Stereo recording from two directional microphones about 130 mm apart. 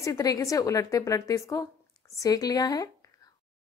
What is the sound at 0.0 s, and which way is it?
A woman's voice, 25° left (ahead or behind).